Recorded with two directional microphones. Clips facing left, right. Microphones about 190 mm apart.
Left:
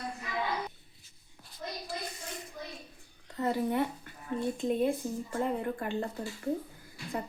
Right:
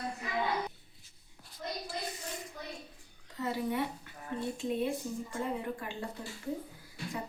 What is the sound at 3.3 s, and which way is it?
Speech, 55° left (ahead or behind).